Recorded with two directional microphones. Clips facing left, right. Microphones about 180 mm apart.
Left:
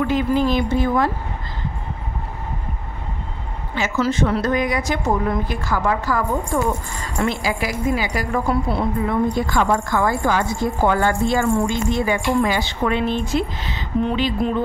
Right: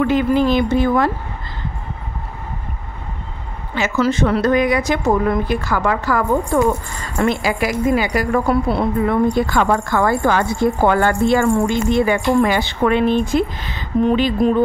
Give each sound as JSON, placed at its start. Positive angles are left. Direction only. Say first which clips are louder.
{"t": 0.0, "sound": "a woman's voice", "louder": "right 3 dB", "side_deg": -65}
{"t": 3.7, "sound": "a woman's voice", "louder": "right 3 dB", "side_deg": -70}